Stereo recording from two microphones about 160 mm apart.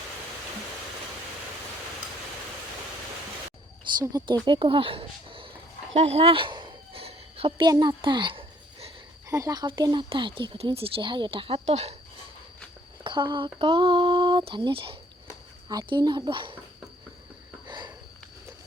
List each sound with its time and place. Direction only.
3.9 s speech: 25° right (ahead or behind)
5.9 s a sound: 40° right (ahead or behind)
7.7 s a sound: 25° right (ahead or behind)
9.3 s speech: 20° right (ahead or behind); by 11.9 s 40° right (ahead or behind)
13.1 s speech: 30° right (ahead or behind)
17.7 s sniff: 25° right (ahead or behind)